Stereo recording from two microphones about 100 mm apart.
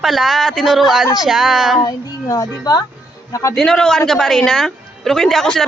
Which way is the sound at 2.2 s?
35° left (ahead or behind).